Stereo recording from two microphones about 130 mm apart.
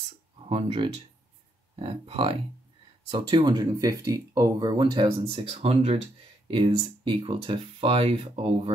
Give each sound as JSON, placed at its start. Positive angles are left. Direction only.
{"t": 0.5, "sound": "speech", "side_deg": -50}
{"t": 5.2, "sound": "speech", "side_deg": -50}